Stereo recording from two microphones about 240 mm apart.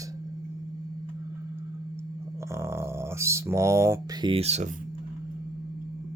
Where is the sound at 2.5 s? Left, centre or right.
Centre; by 4.7 s right.